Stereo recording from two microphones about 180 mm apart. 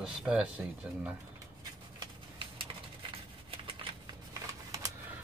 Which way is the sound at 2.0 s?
30° right (ahead or behind).